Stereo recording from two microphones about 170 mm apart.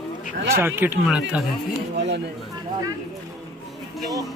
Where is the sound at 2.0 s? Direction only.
90° right.